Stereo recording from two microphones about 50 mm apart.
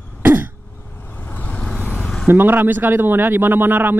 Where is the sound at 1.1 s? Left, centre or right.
Left.